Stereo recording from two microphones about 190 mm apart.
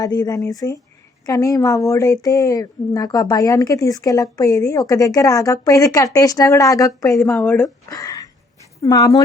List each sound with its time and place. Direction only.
0.0 s speech: 20° left (ahead or behind)